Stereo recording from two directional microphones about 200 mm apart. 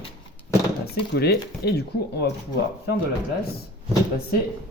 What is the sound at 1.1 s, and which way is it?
Speech, 50° left (ahead or behind).